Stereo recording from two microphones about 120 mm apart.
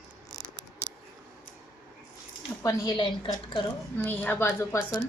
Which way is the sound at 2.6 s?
25° left (ahead or behind).